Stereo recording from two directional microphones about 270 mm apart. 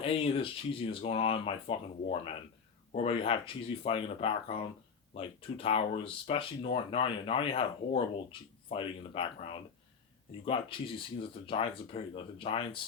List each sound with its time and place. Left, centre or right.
0.0 s speech: left